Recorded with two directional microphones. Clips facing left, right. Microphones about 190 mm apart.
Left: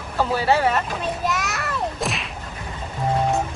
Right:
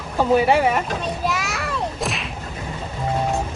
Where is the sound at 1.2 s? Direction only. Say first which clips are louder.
Right 1 dB; centre (ahead or behind).